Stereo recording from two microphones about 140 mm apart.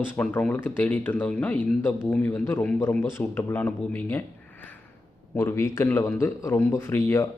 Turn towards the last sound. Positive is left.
turn(degrees=20)  # may be behind; listen again after turning